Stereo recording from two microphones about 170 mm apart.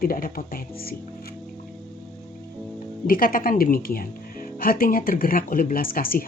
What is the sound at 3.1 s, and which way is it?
Speech, 55° left (ahead or behind).